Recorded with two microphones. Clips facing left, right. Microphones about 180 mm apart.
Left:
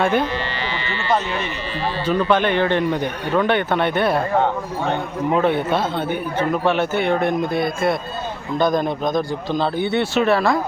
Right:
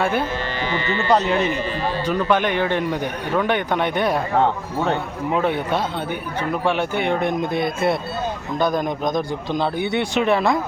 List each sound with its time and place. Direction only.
0.0 s a man's voice: 10° right (ahead or behind)
0.7 s speech: 45° right (ahead or behind)
2.0 s a man's voice: 10° right (ahead or behind)
5.4 s a man's voice: 10° right (ahead or behind)
8.5 s a man's voice: 10° right (ahead or behind)